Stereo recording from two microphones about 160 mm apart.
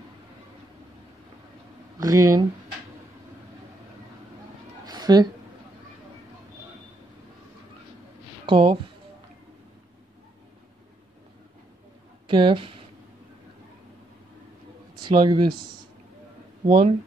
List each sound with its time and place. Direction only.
2.0 s speech: 20° right (ahead or behind)
4.8 s a sound: 25° right (ahead or behind)
8.5 s speech: 35° right (ahead or behind)
12.3 s speech: 30° right (ahead or behind)
15.0 s a man's voice: 30° right (ahead or behind)
16.6 s speech: 35° right (ahead or behind)